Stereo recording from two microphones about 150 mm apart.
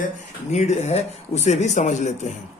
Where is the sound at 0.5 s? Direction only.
50° left (ahead or behind).